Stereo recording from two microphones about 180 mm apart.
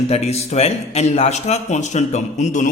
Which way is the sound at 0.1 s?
35° left (ahead or behind).